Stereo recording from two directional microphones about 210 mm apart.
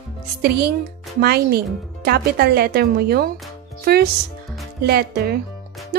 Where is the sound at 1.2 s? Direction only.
50° right (ahead or behind).